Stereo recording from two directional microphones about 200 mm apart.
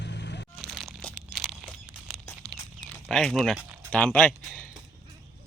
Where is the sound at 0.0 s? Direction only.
60° left (ahead or behind).